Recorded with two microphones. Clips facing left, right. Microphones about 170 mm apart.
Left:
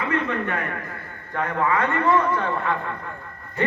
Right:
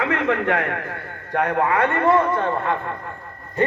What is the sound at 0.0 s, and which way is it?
Speech, 90° right.